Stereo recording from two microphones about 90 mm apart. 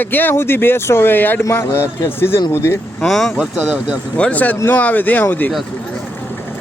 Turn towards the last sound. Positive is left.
turn(degrees=20)  # may be behind; listen again after turning